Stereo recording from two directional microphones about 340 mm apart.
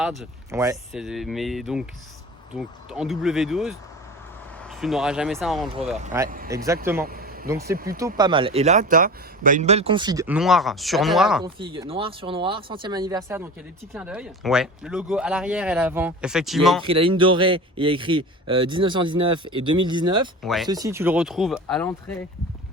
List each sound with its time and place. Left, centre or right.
0.0 s speech: centre
6.2 s speech: right
7.0 s a sound: right
7.7 s speech: right
7.9 s a man's voice: centre
11.4 s a man's voice: centre
16.8 s a man's voice: centre
20.4 s speech: centre
20.7 s speech: centre